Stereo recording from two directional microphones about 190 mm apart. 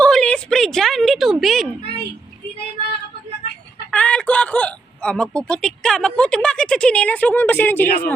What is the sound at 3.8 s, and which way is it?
Speech, 5° left (ahead or behind).